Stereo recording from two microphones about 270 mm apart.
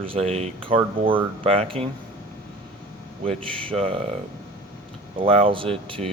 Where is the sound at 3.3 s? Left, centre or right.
Centre.